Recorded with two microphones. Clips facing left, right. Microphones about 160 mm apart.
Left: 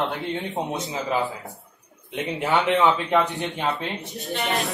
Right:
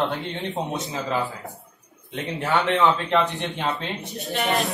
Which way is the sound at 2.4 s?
15° left (ahead or behind).